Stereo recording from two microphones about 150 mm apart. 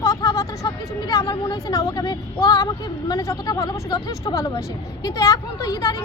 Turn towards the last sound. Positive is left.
turn(degrees=25)  # may be behind; listen again after turning